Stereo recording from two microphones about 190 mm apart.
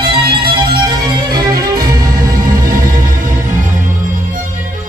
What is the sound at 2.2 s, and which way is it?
Music, 50° right (ahead or behind).